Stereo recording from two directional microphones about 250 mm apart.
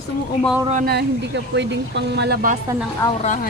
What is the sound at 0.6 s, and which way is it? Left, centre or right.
Speech, right.